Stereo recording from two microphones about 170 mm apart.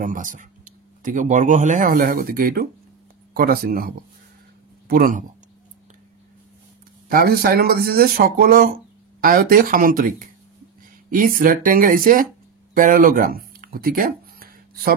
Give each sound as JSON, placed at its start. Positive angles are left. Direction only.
{"t": 0.0, "sound": "speech", "side_deg": -50}
{"t": 7.1, "sound": "speech", "side_deg": -60}